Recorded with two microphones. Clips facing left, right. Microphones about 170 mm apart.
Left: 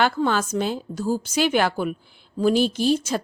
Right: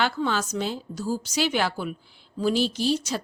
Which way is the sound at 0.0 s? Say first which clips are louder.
Left 4 dB; 50° left (ahead or behind).